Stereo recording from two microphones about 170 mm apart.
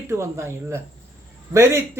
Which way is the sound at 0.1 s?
15° right (ahead or behind).